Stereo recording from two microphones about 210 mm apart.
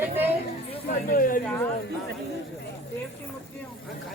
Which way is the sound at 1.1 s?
40° left (ahead or behind).